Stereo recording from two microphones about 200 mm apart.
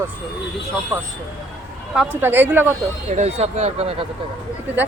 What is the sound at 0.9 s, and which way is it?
Speech, 10° right (ahead or behind).